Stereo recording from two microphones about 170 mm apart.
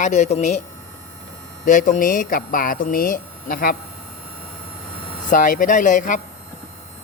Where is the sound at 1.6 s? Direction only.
50° left (ahead or behind).